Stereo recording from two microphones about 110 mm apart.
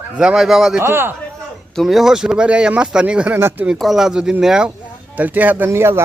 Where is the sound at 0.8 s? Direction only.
20° right (ahead or behind).